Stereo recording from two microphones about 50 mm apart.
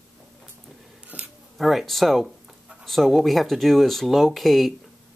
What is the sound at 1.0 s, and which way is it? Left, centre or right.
Scissors, right.